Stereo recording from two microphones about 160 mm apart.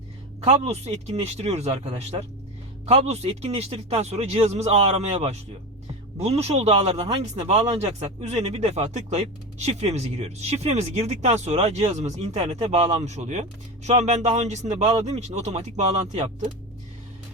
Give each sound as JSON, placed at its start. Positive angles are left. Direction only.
{"t": 0.4, "sound": "speech", "side_deg": -40}